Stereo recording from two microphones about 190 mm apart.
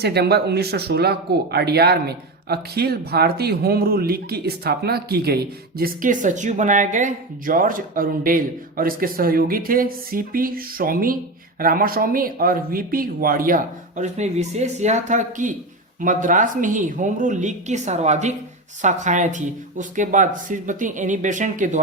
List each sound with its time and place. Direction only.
0.0 s speech: 60° right (ahead or behind); by 21.8 s 40° right (ahead or behind)